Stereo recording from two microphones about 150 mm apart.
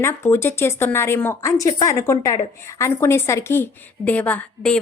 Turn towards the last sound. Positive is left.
turn(degrees=10)  # may be behind; listen again after turning